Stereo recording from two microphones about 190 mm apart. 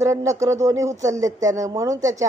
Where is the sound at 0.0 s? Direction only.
15° right (ahead or behind).